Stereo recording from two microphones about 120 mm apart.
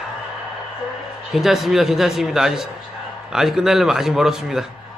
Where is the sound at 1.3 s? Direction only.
Centre (ahead or behind).